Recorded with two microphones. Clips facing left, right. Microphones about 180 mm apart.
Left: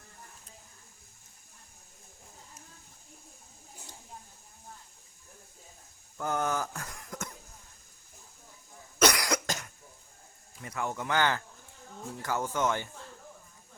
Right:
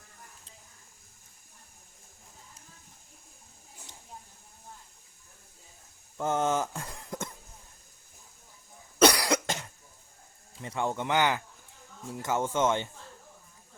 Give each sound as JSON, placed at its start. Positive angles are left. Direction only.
{"t": 6.1, "sound": "a sound", "side_deg": -25}
{"t": 9.0, "sound": "cough", "side_deg": -30}
{"t": 10.5, "sound": "speech", "side_deg": -25}